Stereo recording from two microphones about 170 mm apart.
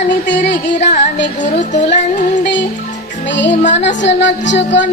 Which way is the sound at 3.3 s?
90° left.